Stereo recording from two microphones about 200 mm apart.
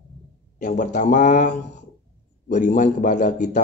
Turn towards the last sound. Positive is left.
turn(degrees=40)  # may be behind; listen again after turning